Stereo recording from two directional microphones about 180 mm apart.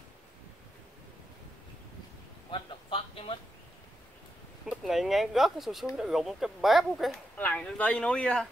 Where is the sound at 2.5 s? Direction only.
30° left (ahead or behind).